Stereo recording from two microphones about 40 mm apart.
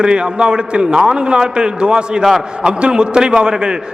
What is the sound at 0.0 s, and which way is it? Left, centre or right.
A man's voice, right.